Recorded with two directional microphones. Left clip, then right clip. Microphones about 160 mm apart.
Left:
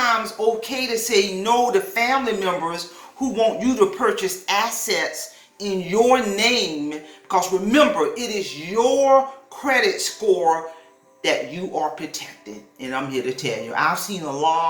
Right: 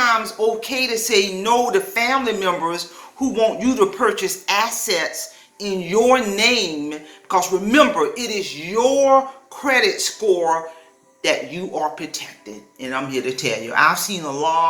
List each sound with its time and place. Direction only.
0.0 s a woman's voice: 5° right (ahead or behind)